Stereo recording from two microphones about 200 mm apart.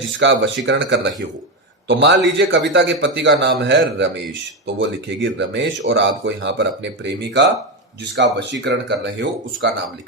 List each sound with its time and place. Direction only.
0.2 s a man's voice: 65° right (ahead or behind)